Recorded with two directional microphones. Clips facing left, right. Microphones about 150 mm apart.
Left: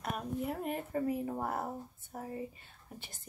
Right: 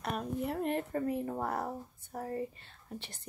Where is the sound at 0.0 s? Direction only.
Centre (ahead or behind).